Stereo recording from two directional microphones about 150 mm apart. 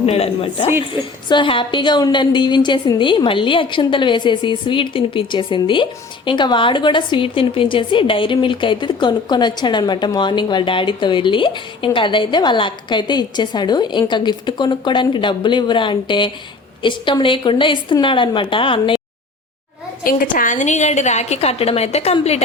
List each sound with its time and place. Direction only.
0.0 s a woman's voice: 40° left (ahead or behind)
20.1 s a woman's voice: 65° left (ahead or behind); by 22.4 s 45° left (ahead or behind)